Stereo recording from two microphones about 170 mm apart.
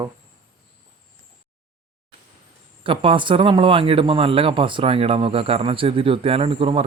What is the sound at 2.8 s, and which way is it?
A man's voice, 30° right (ahead or behind).